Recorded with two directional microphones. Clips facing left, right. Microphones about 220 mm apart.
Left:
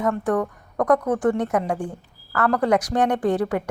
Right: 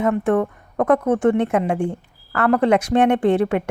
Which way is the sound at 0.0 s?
25° right (ahead or behind).